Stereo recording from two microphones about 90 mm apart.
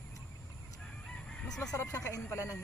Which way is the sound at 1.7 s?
35° left (ahead or behind).